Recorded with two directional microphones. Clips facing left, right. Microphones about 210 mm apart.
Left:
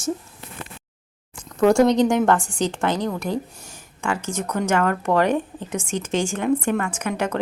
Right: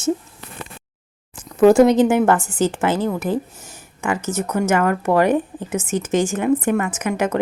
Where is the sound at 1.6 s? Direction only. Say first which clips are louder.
Right 5 dB; 20° right (ahead or behind).